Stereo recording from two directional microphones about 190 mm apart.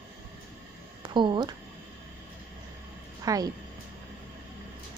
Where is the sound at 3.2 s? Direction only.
20° right (ahead or behind).